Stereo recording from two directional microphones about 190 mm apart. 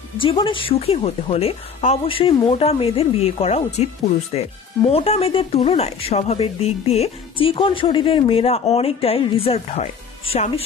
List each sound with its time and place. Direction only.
0.2 s a woman's voice: 25° left (ahead or behind)